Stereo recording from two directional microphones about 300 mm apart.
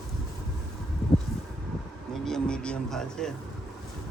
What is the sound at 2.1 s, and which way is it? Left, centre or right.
Speech, centre.